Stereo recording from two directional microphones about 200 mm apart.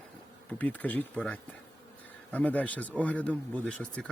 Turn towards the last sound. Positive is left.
turn(degrees=5)  # may be behind; listen again after turning